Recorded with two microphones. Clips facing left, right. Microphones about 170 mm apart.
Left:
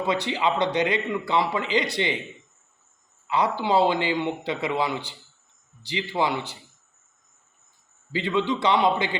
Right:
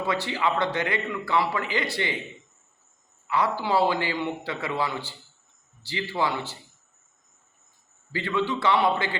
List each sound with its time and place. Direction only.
0.0 s speech: 20° left (ahead or behind)
3.2 s a man's voice: 20° left (ahead or behind)
8.1 s speech: 20° left (ahead or behind)